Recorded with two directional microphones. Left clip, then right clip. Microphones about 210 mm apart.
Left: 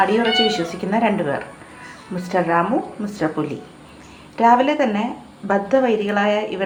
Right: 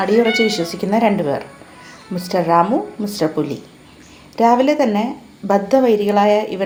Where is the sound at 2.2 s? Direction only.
25° right (ahead or behind).